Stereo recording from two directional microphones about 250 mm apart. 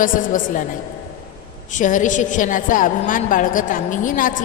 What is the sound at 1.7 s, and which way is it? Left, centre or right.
A woman's voice, left.